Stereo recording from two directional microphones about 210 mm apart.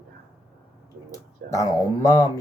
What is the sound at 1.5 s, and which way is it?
Speech, 15° left (ahead or behind).